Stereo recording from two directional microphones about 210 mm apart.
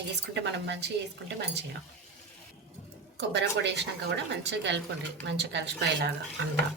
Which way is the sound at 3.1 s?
55° right (ahead or behind).